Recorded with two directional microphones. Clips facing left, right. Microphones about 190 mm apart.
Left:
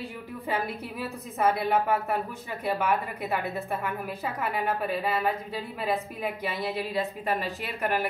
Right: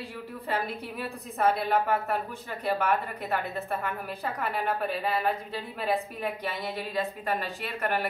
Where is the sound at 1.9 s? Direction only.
Centre (ahead or behind).